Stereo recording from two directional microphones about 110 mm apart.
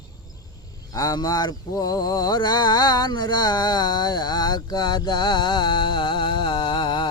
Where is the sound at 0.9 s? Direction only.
35° left (ahead or behind).